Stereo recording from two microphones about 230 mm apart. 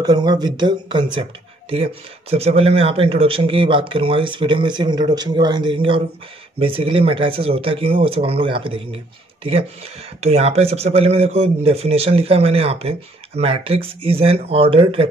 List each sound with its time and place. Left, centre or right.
0.0 s speech: centre